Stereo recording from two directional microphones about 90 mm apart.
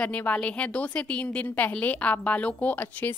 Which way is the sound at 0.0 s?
15° left (ahead or behind).